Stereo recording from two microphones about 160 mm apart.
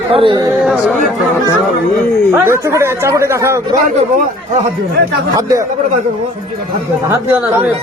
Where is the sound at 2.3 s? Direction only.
15° right (ahead or behind).